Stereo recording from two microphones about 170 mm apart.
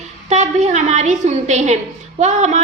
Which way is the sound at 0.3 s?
45° right (ahead or behind).